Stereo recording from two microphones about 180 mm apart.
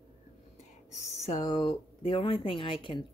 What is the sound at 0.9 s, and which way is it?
A woman's voice, 35° left (ahead or behind).